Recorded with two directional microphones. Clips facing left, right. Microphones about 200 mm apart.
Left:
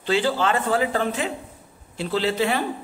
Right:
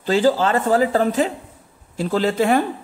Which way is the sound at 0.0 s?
40° right (ahead or behind).